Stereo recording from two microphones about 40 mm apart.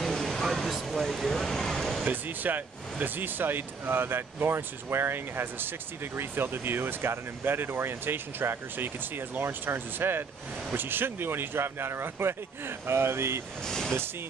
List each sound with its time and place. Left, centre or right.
0.0 s a sound: centre
0.7 s speech: centre
2.0 s speech: right
13.7 s speech: centre